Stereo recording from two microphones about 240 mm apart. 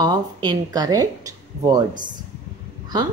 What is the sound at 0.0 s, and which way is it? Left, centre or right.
Speech, centre.